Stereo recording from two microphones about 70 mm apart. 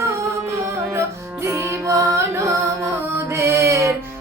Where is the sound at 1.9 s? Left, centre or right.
Right.